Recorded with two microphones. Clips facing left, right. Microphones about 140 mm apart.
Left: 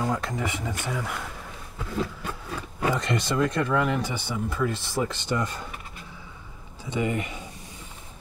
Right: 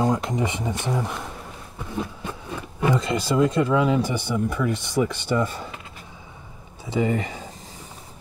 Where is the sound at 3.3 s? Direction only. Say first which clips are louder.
Right 5 dB; 20° right (ahead or behind).